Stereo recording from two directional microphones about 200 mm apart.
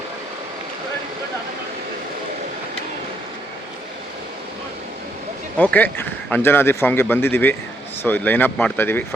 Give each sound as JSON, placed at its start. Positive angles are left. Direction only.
{"t": 5.5, "sound": "a man's voice", "side_deg": 10}